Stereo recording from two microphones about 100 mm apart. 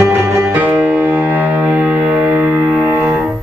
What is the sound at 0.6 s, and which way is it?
Music, 15° right (ahead or behind).